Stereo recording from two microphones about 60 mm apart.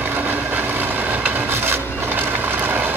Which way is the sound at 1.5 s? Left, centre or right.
Right.